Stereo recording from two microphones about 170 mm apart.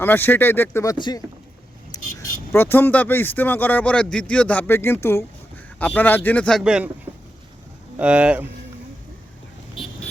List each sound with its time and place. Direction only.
0.0 s speech: 10° left (ahead or behind)
0.9 s speech: 25° left (ahead or behind)
2.1 s speech: 15° left (ahead or behind); by 8.4 s 5° right (ahead or behind)
9.7 s vehicle: centre (ahead or behind)